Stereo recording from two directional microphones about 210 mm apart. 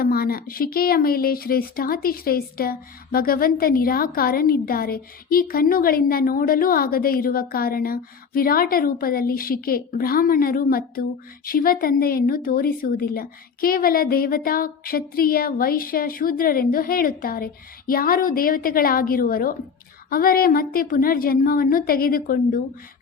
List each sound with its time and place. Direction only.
0.0 s a woman's voice: 45° left (ahead or behind)